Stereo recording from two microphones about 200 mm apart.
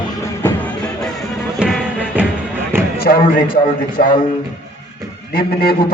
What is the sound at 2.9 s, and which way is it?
Speech, 50° left (ahead or behind).